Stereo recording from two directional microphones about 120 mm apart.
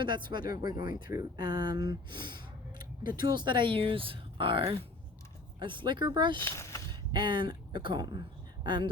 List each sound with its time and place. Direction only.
0.0 s speech: 40° right (ahead or behind)
6.4 s speech: 20° left (ahead or behind)
7.1 s speech: 40° right (ahead or behind)